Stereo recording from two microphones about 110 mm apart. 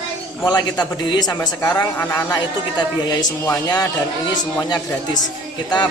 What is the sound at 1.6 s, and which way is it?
Speech, 15° left (ahead or behind).